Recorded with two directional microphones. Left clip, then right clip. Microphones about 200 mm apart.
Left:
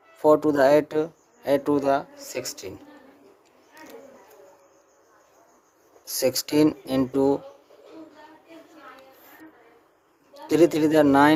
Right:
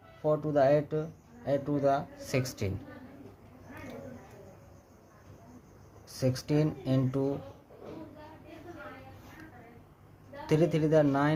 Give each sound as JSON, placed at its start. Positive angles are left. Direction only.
{"t": 0.2, "sound": "speech", "side_deg": 50}
{"t": 6.1, "sound": "speech", "side_deg": 45}
{"t": 10.5, "sound": "speech", "side_deg": 40}